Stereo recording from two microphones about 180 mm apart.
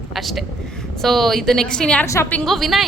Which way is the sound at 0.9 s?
Centre (ahead or behind).